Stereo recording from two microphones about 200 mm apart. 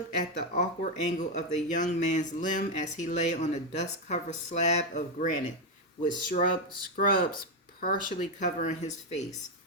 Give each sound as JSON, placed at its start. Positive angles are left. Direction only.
{"t": 0.2, "sound": "speech", "side_deg": 35}